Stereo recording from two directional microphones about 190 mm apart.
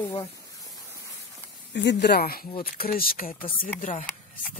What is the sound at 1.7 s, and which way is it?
Speech, 65° left (ahead or behind).